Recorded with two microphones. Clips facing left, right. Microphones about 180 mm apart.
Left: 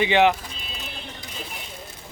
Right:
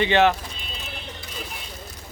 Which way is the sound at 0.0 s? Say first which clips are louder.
Even; 15° left (ahead or behind).